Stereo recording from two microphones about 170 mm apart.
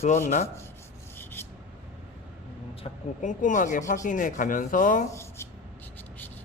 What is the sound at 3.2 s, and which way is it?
Rub, 50° left (ahead or behind).